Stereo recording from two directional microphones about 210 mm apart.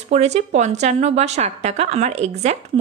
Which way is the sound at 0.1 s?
30° right (ahead or behind).